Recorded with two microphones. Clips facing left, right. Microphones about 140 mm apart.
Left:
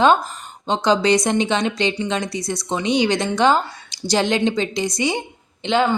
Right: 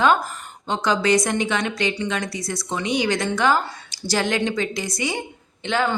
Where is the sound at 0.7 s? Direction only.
20° left (ahead or behind).